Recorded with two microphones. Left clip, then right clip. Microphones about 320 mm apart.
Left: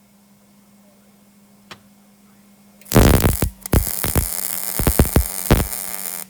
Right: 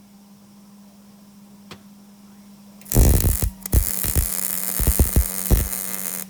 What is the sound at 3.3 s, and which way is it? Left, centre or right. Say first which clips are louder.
Hum: left 7 dB; centre.